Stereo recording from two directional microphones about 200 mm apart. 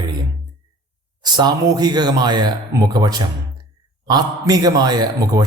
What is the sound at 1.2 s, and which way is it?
Speech, 20° right (ahead or behind).